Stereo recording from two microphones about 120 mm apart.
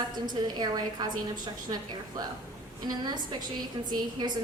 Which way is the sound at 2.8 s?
35° right (ahead or behind).